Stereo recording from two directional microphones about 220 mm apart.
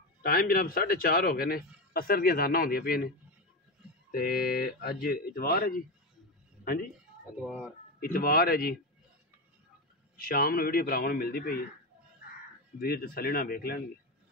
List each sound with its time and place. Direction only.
0.2 s a man's voice: 45° left (ahead or behind)
4.1 s a man's voice: 45° left (ahead or behind)
7.3 s speech: 5° right (ahead or behind)
8.0 s a man's voice: 45° left (ahead or behind)
10.1 s a man's voice: 40° left (ahead or behind)
12.7 s a man's voice: 45° left (ahead or behind)